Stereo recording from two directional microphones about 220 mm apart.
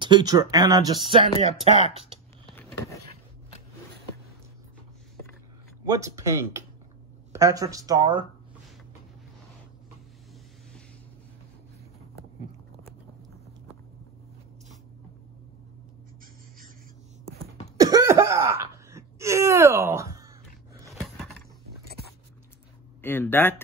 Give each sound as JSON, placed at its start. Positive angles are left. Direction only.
{"t": 0.0, "sound": "speech", "side_deg": -20}
{"t": 1.4, "sound": "speech", "side_deg": -30}
{"t": 5.9, "sound": "speech", "side_deg": -15}
{"t": 17.7, "sound": "throat clearing", "side_deg": -15}
{"t": 21.0, "sound": "a sound", "side_deg": 0}
{"t": 23.0, "sound": "speech", "side_deg": 10}